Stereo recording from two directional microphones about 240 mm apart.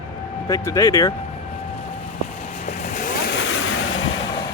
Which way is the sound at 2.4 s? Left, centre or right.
Left.